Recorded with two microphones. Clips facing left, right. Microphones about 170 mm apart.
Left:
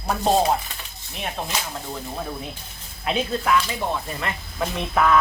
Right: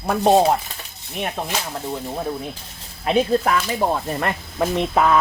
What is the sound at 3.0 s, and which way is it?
Speech, 40° right (ahead or behind).